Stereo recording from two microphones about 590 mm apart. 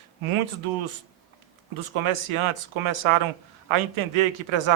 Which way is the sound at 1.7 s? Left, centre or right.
Right.